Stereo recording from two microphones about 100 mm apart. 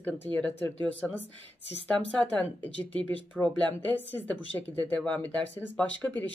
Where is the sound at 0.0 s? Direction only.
15° left (ahead or behind).